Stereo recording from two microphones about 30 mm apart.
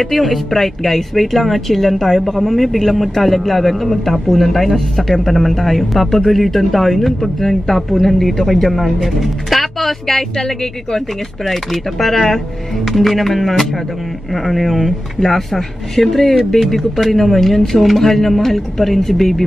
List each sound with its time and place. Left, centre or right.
0.0 s speech: centre
11.4 s speech: centre